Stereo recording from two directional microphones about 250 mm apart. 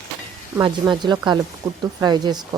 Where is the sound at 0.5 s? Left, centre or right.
Centre.